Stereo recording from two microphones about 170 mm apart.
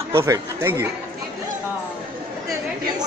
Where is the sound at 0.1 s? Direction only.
15° right (ahead or behind).